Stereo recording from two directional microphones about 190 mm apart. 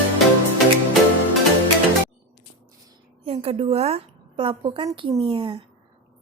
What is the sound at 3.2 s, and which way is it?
A woman's voice, 30° right (ahead or behind).